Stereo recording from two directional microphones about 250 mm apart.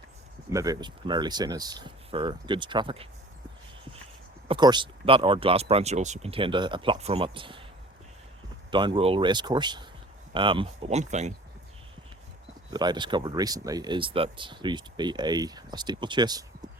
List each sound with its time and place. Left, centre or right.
0.5 s speech: centre
4.4 s speech: centre
8.7 s speech: centre
12.7 s speech: centre